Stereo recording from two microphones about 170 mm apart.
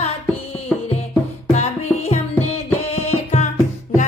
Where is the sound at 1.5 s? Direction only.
40° left (ahead or behind).